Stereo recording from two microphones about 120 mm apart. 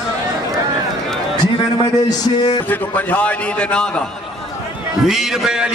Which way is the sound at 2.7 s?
15° left (ahead or behind).